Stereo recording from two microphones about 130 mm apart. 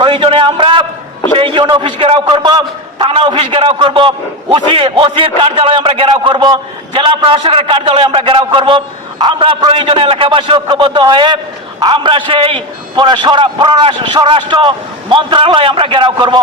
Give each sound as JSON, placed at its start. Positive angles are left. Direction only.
{"t": 0.0, "sound": "a sound", "side_deg": -40}
{"t": 1.4, "sound": "a man's voice", "side_deg": -40}
{"t": 3.1, "sound": "a man's voice", "side_deg": -45}